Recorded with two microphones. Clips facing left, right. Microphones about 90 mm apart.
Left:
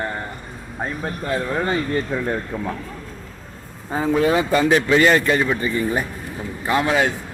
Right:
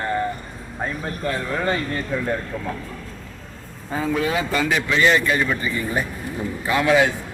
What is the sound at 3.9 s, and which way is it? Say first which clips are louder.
Speech: left 4 dB; 35° left (ahead or behind).